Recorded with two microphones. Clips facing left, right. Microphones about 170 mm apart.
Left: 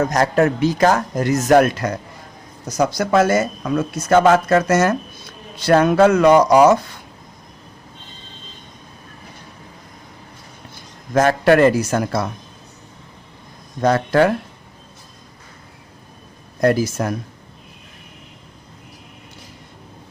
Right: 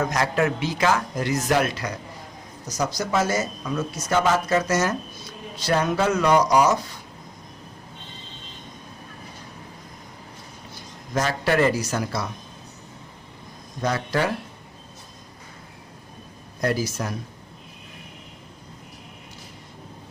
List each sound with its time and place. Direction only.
0.0 s speech: 40° left (ahead or behind)
11.1 s speech: 55° left (ahead or behind)
13.8 s speech: 50° left (ahead or behind)
16.6 s speech: 50° left (ahead or behind)